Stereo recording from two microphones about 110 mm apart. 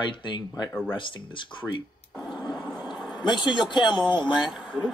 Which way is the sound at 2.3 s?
Centre (ahead or behind).